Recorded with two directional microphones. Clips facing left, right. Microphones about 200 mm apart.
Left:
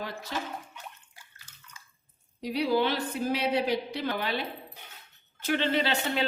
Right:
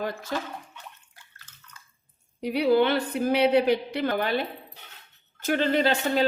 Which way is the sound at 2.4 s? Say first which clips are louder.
Right 5 dB; 60° right (ahead or behind).